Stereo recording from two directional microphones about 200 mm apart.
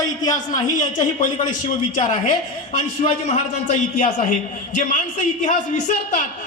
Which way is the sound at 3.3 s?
35° left (ahead or behind).